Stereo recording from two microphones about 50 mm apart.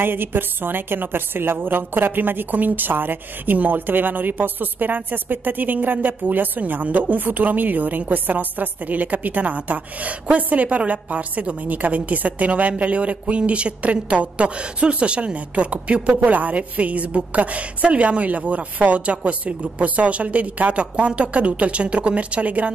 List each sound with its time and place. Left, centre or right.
0.0 s a woman's voice: right